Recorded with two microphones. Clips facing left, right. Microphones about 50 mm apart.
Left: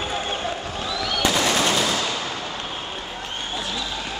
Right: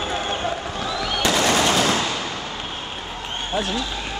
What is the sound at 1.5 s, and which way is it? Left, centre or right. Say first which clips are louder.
Machine gun: right 2 dB; centre.